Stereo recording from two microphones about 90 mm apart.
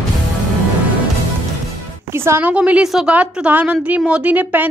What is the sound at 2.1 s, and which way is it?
Speech, 30° right (ahead or behind).